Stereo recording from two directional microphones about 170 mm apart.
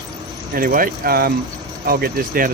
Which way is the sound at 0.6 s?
55° right (ahead or behind).